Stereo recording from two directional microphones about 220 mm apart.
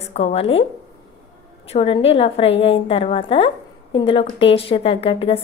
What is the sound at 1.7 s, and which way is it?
A woman's voice, 25° left (ahead or behind).